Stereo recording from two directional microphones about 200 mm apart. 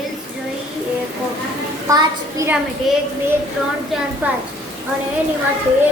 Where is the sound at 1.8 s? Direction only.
15° right (ahead or behind).